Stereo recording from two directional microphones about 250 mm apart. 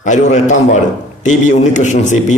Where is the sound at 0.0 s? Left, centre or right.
Left.